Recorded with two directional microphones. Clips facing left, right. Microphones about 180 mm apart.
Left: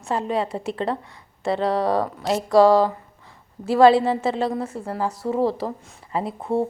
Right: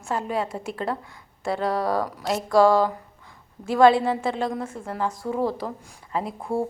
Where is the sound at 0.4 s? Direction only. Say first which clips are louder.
Left 3 dB; 30° left (ahead or behind).